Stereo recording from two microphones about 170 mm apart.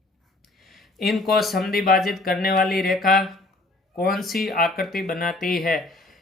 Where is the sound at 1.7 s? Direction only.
60° left (ahead or behind).